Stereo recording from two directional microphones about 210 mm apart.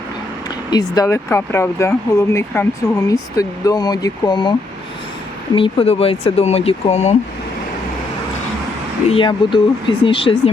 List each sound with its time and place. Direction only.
0.7 s speech: 20° left (ahead or behind)
5.5 s speech: 25° left (ahead or behind)
9.0 s speech: 25° left (ahead or behind)